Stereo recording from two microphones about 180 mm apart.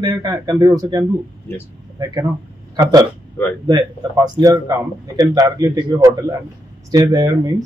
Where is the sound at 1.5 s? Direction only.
15° left (ahead or behind).